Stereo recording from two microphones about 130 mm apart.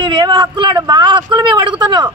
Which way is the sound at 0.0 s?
40° right (ahead or behind).